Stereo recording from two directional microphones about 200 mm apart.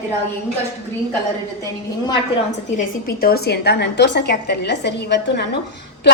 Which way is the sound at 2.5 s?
45° left (ahead or behind).